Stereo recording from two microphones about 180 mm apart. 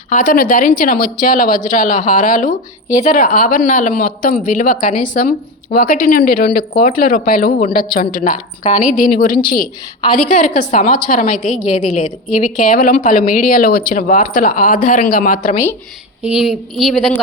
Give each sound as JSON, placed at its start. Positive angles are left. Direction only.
{"t": 0.1, "sound": "a woman's voice", "side_deg": 50}
{"t": 16.2, "sound": "a woman's voice", "side_deg": -5}